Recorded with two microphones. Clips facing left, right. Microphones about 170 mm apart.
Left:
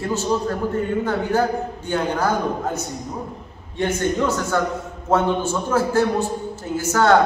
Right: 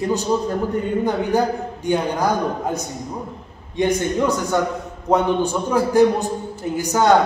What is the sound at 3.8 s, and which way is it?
A man's voice, 15° right (ahead or behind).